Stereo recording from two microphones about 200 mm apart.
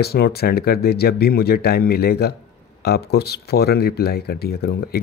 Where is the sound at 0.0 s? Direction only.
50° left (ahead or behind).